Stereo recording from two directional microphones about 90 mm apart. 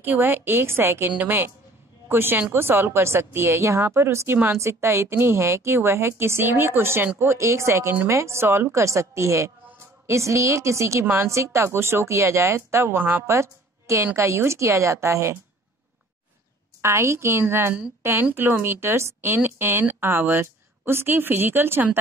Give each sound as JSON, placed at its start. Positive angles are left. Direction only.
{"t": 0.0, "sound": "a woman's voice", "side_deg": -20}
{"t": 13.3, "sound": "a woman's voice", "side_deg": -30}
{"t": 16.8, "sound": "a woman's voice", "side_deg": -30}